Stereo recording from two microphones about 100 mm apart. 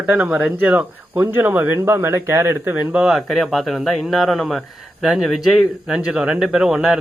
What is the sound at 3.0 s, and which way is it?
Speech, centre (ahead or behind).